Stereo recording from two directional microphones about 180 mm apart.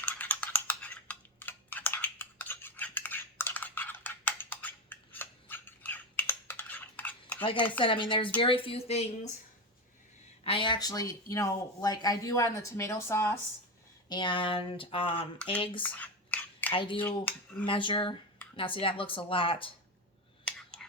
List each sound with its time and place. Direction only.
0.0 s typing: 10° left (ahead or behind)
7.4 s speech: 30° left (ahead or behind)
10.4 s speech: 30° left (ahead or behind)
14.1 s speech: 25° left (ahead or behind)
15.8 s scissors: 10° left (ahead or behind)
16.7 s speech: 30° left (ahead or behind)
17.0 s speech: 10° left (ahead or behind)
17.7 s speech: 25° left (ahead or behind)